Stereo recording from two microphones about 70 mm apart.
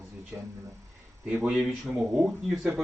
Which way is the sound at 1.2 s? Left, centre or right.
Centre.